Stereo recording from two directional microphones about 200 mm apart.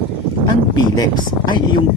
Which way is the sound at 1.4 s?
25° left (ahead or behind).